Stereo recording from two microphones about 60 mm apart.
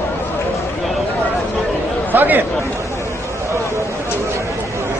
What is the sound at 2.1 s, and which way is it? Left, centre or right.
Speech, right.